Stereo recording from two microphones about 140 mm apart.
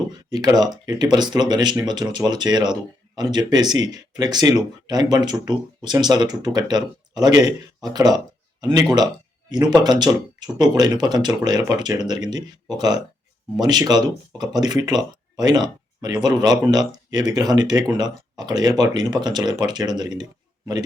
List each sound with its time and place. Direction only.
0.3 s speech: 30° right (ahead or behind)